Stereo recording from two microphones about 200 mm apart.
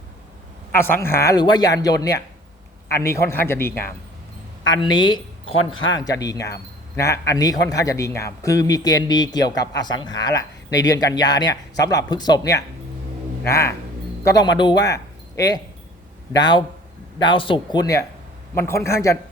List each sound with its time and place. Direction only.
0.7 s speech: 10° left (ahead or behind)
4.8 s speech: 20° left (ahead or behind)
5.5 s speech: 90° left
5.9 s speech: 20° left (ahead or behind)